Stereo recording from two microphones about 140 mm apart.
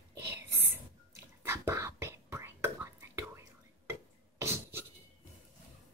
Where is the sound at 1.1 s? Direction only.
20° right (ahead or behind).